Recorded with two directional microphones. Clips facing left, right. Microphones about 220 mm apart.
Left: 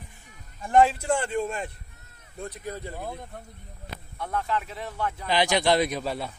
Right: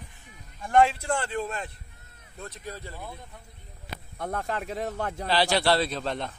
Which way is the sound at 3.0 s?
55° left (ahead or behind).